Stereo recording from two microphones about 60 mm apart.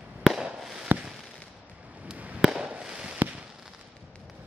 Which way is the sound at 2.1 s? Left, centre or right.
Right.